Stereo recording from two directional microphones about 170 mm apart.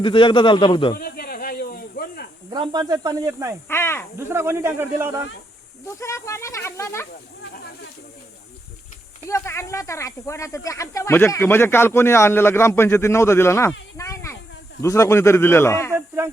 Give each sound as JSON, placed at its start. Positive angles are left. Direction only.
{"t": 0.0, "sound": "a man's voice", "side_deg": 30}
{"t": 0.9, "sound": "snake", "side_deg": 65}
{"t": 2.5, "sound": "speech", "side_deg": -25}
{"t": 3.7, "sound": "speech", "side_deg": 15}
{"t": 4.3, "sound": "speech", "side_deg": -15}
{"t": 6.0, "sound": "speech", "side_deg": 15}
{"t": 9.2, "sound": "speech", "side_deg": 15}
{"t": 15.9, "sound": "speech", "side_deg": -15}